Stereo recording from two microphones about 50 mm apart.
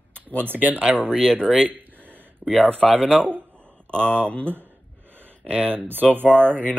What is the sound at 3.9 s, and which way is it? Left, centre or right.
Speech, left.